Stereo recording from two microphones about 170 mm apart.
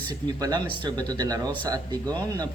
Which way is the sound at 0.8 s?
25° right (ahead or behind).